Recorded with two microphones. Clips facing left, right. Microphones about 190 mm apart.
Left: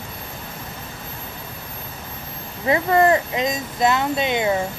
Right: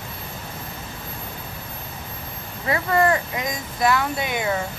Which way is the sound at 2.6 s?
25° left (ahead or behind).